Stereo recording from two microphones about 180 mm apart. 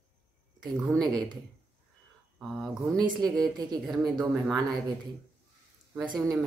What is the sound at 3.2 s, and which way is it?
Speech, 20° right (ahead or behind).